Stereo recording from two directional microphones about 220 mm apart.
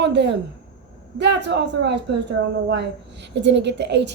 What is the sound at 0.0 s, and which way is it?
Speech, 50° right (ahead or behind).